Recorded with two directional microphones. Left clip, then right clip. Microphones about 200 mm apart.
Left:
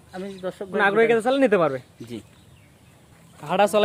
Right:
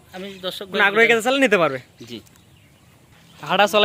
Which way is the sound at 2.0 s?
60° left (ahead or behind).